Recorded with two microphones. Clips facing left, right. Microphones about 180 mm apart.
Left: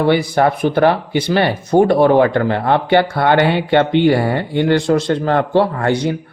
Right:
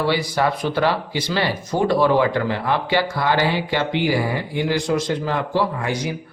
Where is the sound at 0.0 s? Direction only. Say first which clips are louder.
Left 6 dB; 55° left (ahead or behind).